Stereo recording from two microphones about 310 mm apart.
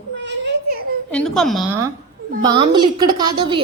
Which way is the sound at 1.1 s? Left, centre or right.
Centre.